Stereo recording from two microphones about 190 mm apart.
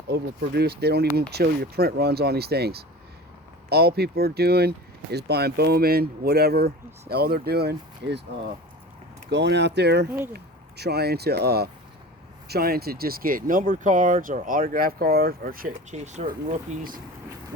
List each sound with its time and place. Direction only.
0.1 s speech: 55° right (ahead or behind)
9.3 s speech: 65° right (ahead or behind); by 17.0 s 45° right (ahead or behind)